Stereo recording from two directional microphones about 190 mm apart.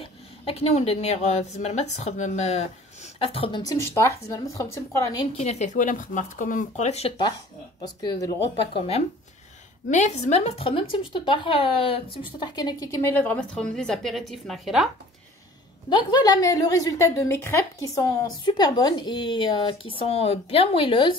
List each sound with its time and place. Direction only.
0.0 s a woman's voice: 30° left (ahead or behind); by 5.2 s 15° left (ahead or behind)
5.4 s speech: 35° left (ahead or behind)
8.7 s a woman's voice: 30° left (ahead or behind); by 14.9 s centre (ahead or behind)
15.9 s a woman's voice: 20° left (ahead or behind)